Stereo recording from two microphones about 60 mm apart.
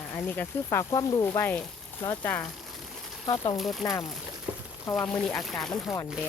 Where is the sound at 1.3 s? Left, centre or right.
Left.